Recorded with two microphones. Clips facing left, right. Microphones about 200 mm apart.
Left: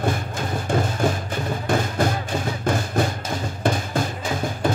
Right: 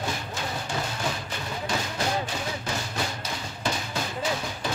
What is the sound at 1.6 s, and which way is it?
Music, 50° left (ahead or behind).